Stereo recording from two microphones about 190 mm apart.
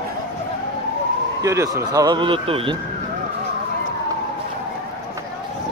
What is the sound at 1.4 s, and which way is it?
Speech, 15° right (ahead or behind).